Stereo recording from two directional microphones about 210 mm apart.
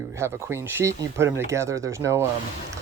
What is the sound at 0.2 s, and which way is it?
Speech, 10° right (ahead or behind).